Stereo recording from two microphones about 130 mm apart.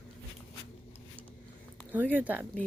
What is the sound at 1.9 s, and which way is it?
Speech, 15° right (ahead or behind).